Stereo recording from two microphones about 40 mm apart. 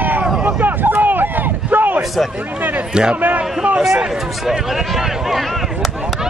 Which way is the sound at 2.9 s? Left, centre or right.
Right.